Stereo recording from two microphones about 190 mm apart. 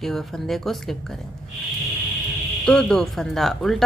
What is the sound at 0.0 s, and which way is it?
Speech, centre (ahead or behind).